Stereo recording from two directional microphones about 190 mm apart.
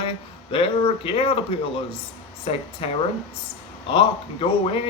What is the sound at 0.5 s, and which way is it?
Speech, 30° left (ahead or behind).